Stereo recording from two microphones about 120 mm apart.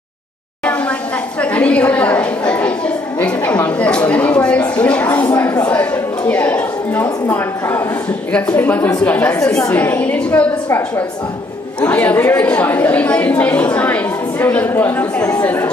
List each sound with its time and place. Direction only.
1.4 s a woman's voice: 10° left (ahead or behind)
11.8 s a woman's voice: 15° left (ahead or behind)